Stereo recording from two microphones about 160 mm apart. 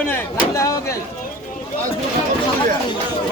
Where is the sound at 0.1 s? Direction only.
20° left (ahead or behind).